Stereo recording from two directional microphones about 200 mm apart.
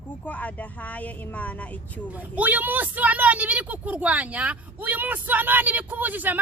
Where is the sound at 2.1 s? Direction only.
10° right (ahead or behind).